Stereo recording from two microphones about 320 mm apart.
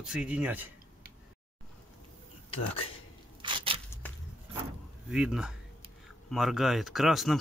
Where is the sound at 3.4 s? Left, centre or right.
Centre.